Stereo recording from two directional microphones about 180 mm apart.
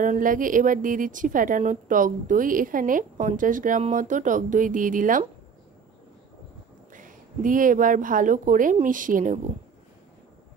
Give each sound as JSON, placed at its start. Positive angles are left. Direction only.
{"t": 0.0, "sound": "a woman's voice", "side_deg": -45}
{"t": 6.9, "sound": "a woman's voice", "side_deg": -45}